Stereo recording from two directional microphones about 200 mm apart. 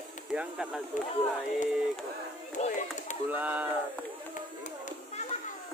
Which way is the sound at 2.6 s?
40° left (ahead or behind).